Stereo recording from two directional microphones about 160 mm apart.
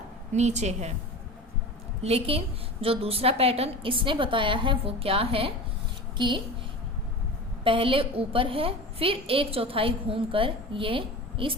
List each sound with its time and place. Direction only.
0.3 s a woman's voice: 45° right (ahead or behind)
2.0 s a woman's voice: 40° right (ahead or behind)
7.6 s a woman's voice: 35° right (ahead or behind)